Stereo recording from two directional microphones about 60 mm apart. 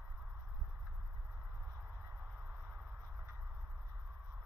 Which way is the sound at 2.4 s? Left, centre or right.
Right.